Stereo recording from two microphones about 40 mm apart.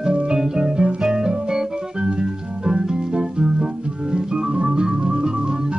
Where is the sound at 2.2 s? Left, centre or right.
Centre.